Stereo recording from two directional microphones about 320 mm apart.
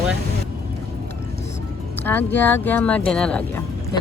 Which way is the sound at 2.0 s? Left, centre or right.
Centre.